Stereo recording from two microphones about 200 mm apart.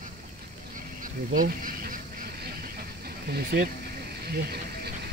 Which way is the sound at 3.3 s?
50° right (ahead or behind).